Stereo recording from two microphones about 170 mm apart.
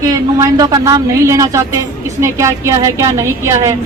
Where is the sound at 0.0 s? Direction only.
20° right (ahead or behind).